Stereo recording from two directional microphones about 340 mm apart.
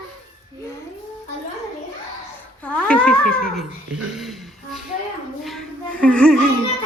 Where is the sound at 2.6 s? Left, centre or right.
Centre.